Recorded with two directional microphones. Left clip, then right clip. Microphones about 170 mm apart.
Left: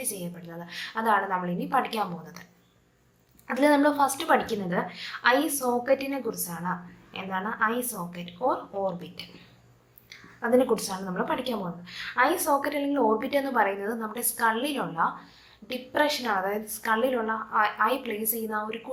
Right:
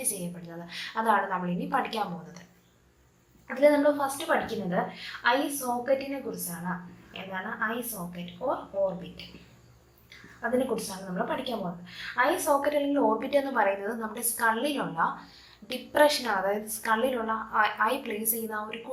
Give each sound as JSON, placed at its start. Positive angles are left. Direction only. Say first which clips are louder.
{"t": 0.0, "sound": "a woman's voice", "louder": "even", "side_deg": 20}
{"t": 3.4, "sound": "a woman's voice", "louder": "even", "side_deg": 50}
{"t": 10.4, "sound": "a woman's voice", "louder": "left 5 dB", "side_deg": 45}